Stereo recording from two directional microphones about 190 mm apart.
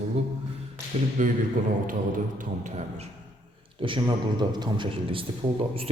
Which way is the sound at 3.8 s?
25° right (ahead or behind).